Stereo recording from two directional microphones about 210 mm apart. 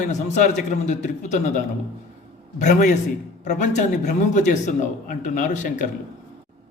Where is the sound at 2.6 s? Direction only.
35° left (ahead or behind).